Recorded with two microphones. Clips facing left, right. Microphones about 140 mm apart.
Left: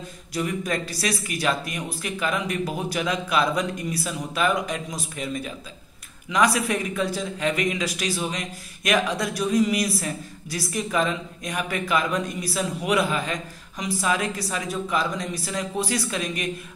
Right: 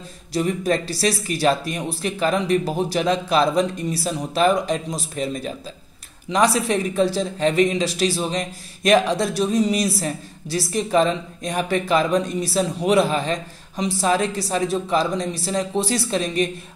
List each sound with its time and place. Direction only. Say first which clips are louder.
0.3 s speech: right 6 dB; 30° right (ahead or behind)